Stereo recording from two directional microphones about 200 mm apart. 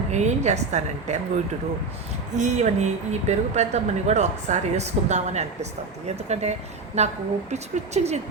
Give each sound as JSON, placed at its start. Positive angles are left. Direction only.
{"t": 0.1, "sound": "a woman's voice", "side_deg": -35}
{"t": 2.3, "sound": "a woman's voice", "side_deg": -35}